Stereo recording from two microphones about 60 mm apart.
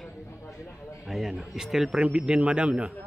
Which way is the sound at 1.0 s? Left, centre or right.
Centre.